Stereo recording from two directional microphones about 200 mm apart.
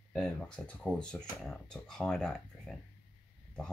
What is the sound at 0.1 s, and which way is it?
Speech, centre (ahead or behind).